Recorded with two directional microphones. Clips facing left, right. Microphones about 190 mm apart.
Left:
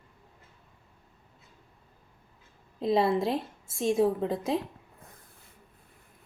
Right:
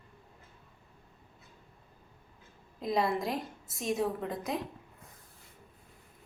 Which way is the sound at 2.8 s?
30° left (ahead or behind).